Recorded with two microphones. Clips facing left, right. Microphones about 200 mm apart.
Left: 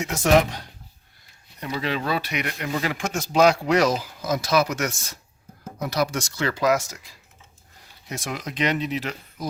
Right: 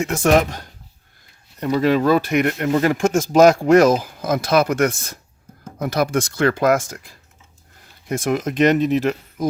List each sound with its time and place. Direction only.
0.0 s speech: 50° right (ahead or behind)